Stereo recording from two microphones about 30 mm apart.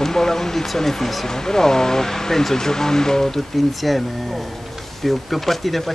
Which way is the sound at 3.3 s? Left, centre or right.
Centre.